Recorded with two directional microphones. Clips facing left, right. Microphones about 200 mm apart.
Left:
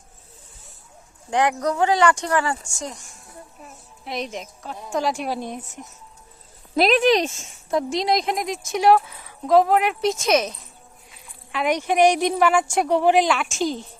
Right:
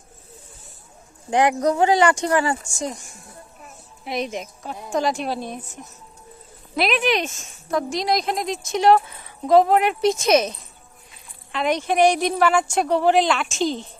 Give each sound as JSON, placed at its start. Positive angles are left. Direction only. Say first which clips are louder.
{"t": 1.3, "sound": "speech", "louder": "right 3 dB", "side_deg": -10}
{"t": 4.0, "sound": "speech", "louder": "right 3 dB", "side_deg": -5}
{"t": 5.0, "sound": "a woman's voice", "louder": "right 1 dB", "side_deg": 10}
{"t": 6.7, "sound": "a woman's voice", "louder": "left 4 dB", "side_deg": 40}
{"t": 11.5, "sound": "a woman's voice", "louder": "even", "side_deg": 10}